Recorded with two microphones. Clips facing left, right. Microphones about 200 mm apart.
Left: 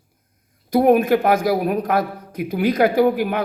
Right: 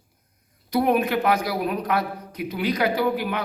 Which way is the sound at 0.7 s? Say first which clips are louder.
Left 6 dB; 50° left (ahead or behind).